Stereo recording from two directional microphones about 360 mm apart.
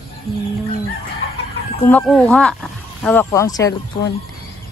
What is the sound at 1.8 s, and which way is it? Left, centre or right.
Speech, centre.